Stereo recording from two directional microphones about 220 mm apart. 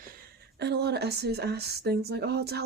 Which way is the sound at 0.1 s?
50° right (ahead or behind).